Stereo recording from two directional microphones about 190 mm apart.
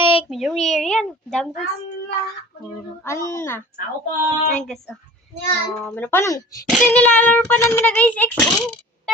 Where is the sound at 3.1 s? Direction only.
15° left (ahead or behind).